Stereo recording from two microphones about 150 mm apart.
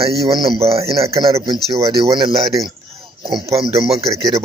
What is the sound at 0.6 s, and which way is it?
Speech, 20° right (ahead or behind).